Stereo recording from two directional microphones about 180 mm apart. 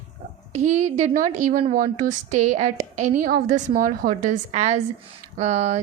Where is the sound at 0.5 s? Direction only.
40° right (ahead or behind).